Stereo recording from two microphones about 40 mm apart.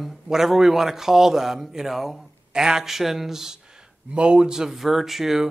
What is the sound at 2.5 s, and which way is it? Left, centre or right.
Speech, centre.